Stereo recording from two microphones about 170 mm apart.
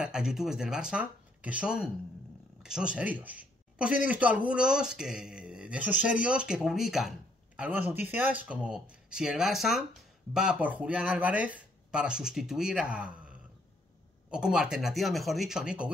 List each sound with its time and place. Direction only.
0.0 s speech: 5° right (ahead or behind)